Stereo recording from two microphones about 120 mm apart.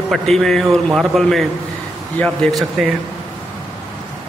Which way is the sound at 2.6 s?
Centre (ahead or behind).